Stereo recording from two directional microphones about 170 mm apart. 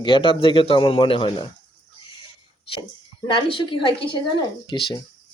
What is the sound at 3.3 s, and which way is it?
Speech, 30° left (ahead or behind).